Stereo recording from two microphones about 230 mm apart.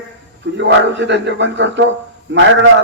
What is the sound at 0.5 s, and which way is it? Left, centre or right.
A man's voice, right.